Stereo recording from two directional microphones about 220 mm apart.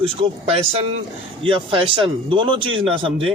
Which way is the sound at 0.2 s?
25° right (ahead or behind).